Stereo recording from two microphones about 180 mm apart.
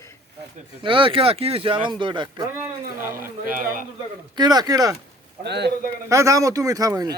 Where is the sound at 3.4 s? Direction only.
50° right (ahead or behind).